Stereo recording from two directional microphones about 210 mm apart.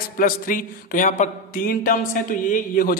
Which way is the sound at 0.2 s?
40° left (ahead or behind).